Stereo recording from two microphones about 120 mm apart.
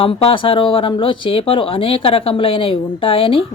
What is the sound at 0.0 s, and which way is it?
Speech, 50° left (ahead or behind).